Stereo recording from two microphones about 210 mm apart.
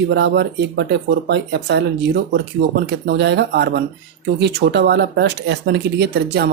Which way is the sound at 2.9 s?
50° right (ahead or behind).